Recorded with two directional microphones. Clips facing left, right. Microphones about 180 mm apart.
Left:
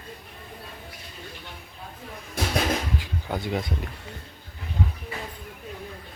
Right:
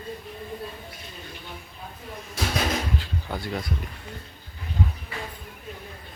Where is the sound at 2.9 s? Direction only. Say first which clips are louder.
Left 1 dB; 15° left (ahead or behind).